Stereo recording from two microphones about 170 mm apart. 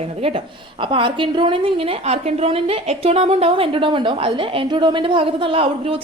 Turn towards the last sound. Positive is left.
turn(degrees=-30)  # may be behind; listen again after turning